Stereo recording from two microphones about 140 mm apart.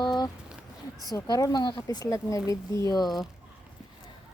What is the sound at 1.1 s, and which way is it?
Speech, 25° left (ahead or behind).